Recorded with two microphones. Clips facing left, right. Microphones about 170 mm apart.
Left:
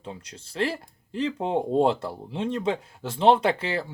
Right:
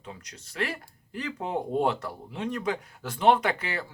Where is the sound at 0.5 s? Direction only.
30° left (ahead or behind).